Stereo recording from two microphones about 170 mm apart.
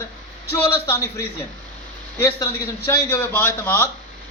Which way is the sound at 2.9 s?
15° left (ahead or behind).